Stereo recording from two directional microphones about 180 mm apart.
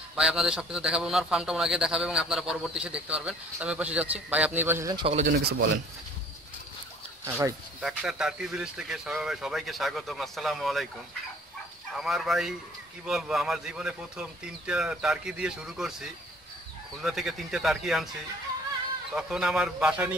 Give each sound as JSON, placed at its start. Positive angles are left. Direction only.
{"t": 0.1, "sound": "a man's voice", "side_deg": -5}
{"t": 4.9, "sound": "speech", "side_deg": -30}
{"t": 5.2, "sound": "speech", "side_deg": -55}
{"t": 7.8, "sound": "a man's voice", "side_deg": -5}
{"t": 11.9, "sound": "a man's voice", "side_deg": 0}
{"t": 19.1, "sound": "a man's voice", "side_deg": -5}